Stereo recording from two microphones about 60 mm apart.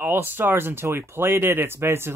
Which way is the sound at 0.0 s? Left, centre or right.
Right.